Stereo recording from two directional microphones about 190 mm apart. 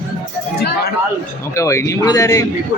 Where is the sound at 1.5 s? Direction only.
15° left (ahead or behind).